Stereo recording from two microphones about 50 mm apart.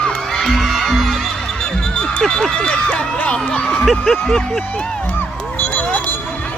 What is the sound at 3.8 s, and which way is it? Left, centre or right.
Speech, centre.